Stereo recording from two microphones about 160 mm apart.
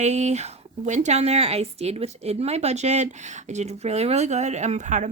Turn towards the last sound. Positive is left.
turn(degrees=-50)  # may be behind; listen again after turning